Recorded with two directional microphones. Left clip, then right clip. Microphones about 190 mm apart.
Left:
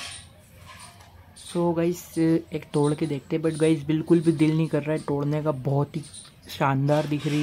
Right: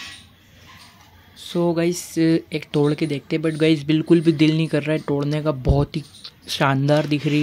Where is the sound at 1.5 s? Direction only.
20° right (ahead or behind).